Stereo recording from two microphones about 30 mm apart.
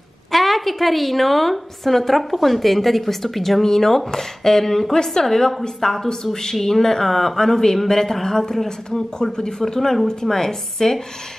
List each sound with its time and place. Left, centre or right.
0.3 s a woman's voice: centre
3.6 s a woman's voice: centre
9.8 s a woman's voice: centre